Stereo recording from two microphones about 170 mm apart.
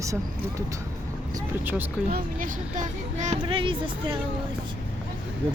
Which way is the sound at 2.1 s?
60° right (ahead or behind).